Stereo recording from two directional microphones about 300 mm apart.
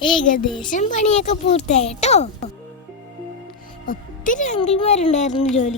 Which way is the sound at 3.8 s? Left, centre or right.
Left.